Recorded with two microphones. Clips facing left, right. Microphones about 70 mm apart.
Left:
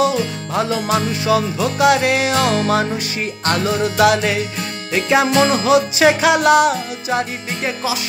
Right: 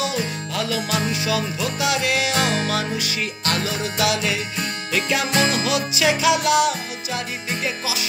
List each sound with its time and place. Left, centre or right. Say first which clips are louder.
0.0 s music: left 7 dB; left
4.9 s music: left 7 dB; left